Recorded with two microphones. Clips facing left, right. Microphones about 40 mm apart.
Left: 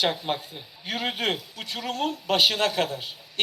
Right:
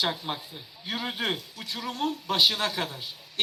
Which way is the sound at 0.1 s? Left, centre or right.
Centre.